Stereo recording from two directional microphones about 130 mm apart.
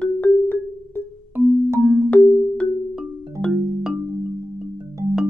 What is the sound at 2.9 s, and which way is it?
Music, centre (ahead or behind).